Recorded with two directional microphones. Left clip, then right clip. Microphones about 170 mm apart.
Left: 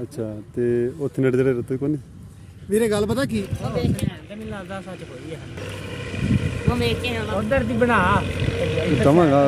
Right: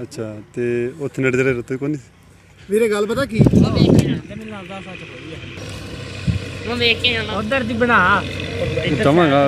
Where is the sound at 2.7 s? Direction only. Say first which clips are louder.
Right 3 dB; 35° left (ahead or behind).